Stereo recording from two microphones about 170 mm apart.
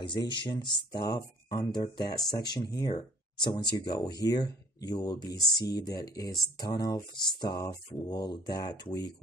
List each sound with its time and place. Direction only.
0.0 s speech: 25° left (ahead or behind)